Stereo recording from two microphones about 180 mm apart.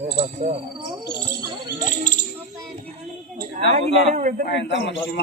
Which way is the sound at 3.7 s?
40° right (ahead or behind).